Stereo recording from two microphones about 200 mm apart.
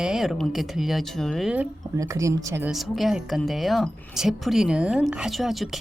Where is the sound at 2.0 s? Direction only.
15° right (ahead or behind).